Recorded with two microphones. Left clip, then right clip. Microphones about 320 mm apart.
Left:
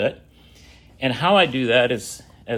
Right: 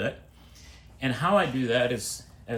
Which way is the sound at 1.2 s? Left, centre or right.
Left.